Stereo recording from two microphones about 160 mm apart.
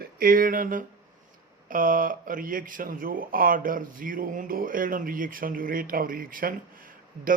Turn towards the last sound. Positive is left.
turn(degrees=-60)  # may be behind; listen again after turning